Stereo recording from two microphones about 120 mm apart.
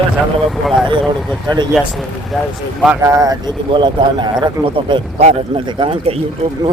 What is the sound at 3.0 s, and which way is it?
Speech, 30° right (ahead or behind).